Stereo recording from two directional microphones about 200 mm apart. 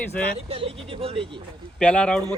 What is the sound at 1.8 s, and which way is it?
Speech, 5° left (ahead or behind).